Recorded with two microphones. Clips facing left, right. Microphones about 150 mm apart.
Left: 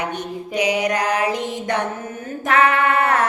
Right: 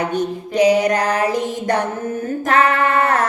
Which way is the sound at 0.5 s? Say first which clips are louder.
Right 7 dB; 40° right (ahead or behind).